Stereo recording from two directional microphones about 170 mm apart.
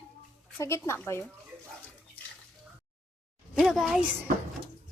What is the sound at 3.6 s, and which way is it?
Speech, centre (ahead or behind).